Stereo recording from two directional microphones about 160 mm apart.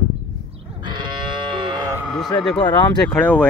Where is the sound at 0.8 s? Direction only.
30° right (ahead or behind).